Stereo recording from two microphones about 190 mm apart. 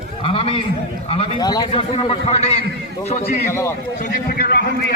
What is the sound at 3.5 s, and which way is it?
Speech, 15° left (ahead or behind).